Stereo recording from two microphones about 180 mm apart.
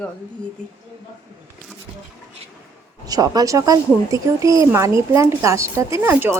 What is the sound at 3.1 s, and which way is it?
Speech, 20° right (ahead or behind).